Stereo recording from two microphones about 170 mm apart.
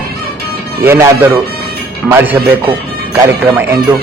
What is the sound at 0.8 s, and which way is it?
A man's voice, 15° right (ahead or behind).